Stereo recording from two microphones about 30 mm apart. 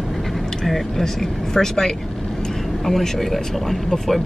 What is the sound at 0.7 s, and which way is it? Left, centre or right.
Speech, centre.